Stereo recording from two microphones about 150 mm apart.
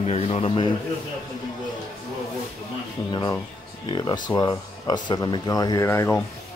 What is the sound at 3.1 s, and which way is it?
Speech, 30° left (ahead or behind).